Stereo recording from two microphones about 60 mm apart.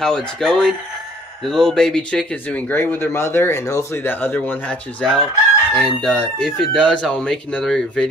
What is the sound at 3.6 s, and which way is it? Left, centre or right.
Speech, left.